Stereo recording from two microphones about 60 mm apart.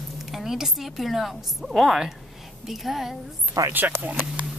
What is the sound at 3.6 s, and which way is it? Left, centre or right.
Speech, right.